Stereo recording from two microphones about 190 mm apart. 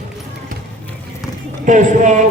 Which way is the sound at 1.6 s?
40° right (ahead or behind).